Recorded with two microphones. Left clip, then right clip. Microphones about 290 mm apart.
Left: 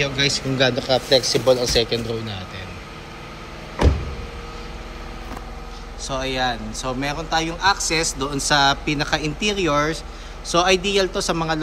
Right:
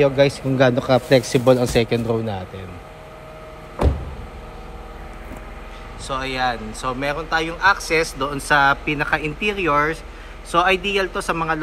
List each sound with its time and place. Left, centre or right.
0.0 s a man's voice: centre
1.4 s speech: right
1.8 s a man's voice: centre
6.0 s speech: centre